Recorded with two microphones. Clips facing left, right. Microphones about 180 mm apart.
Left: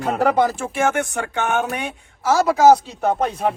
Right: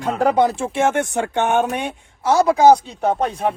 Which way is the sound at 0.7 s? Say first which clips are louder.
Right 2 dB; 25° right (ahead or behind).